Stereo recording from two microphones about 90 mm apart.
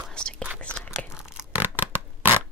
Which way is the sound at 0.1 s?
10° left (ahead or behind).